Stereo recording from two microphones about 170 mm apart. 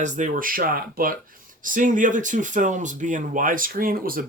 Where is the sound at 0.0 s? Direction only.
50° right (ahead or behind).